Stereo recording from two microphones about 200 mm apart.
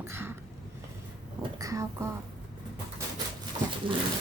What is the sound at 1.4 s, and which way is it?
Speech, 15° right (ahead or behind).